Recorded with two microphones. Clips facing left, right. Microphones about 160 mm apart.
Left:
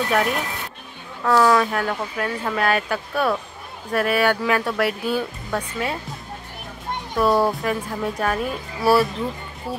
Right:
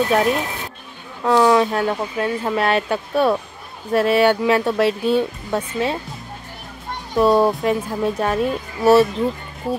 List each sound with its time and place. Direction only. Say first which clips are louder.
0.1 s speech: right 4 dB; 25° right (ahead or behind)
7.2 s speech: right 4 dB; 20° right (ahead or behind)